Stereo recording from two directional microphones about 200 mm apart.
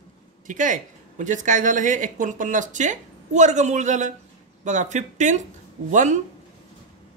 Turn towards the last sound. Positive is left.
turn(degrees=-40)  # may be behind; listen again after turning